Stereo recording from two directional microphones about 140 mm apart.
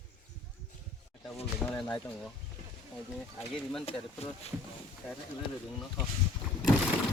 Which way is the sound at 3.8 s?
45° left (ahead or behind).